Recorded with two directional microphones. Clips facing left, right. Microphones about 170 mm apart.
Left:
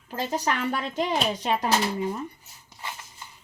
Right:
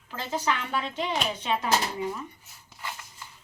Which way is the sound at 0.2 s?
40° left (ahead or behind).